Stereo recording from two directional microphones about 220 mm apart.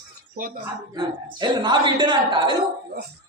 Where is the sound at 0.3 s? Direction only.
40° right (ahead or behind).